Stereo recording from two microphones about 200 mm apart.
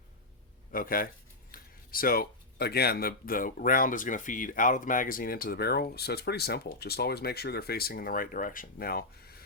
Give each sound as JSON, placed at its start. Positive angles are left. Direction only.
{"t": 0.7, "sound": "speech", "side_deg": 45}